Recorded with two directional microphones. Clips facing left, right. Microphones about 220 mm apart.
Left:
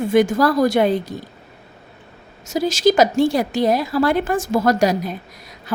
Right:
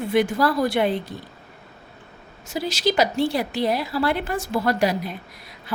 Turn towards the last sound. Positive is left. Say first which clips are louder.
# left 4 dB
turn(degrees=45)  # may be behind; listen again after turning